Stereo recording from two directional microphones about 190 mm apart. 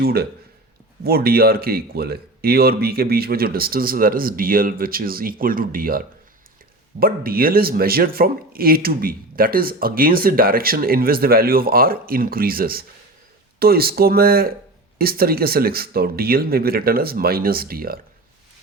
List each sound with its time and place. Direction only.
0.0 s speech: 55° right (ahead or behind)